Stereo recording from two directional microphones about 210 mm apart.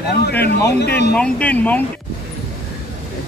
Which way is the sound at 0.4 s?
50° left (ahead or behind).